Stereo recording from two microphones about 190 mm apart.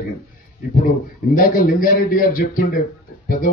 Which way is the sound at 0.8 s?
45° left (ahead or behind).